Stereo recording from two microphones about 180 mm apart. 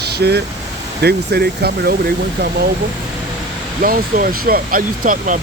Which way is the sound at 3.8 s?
55° right (ahead or behind).